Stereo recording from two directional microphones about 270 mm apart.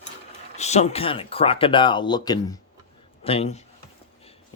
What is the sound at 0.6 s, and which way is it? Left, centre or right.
Speech, left.